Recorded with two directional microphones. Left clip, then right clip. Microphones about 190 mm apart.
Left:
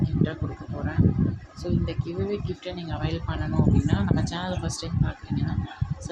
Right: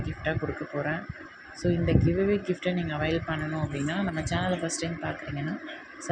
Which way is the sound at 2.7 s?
5° right (ahead or behind).